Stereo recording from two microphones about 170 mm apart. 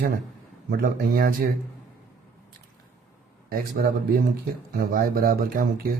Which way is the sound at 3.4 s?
60° right (ahead or behind).